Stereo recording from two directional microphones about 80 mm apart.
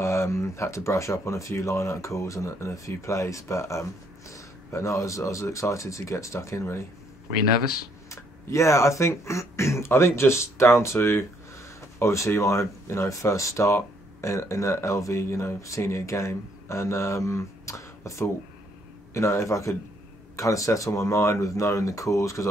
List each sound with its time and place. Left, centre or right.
0.0 s speech: left
8.1 s speech: left